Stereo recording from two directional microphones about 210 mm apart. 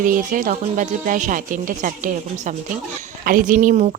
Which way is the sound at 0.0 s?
40° right (ahead or behind).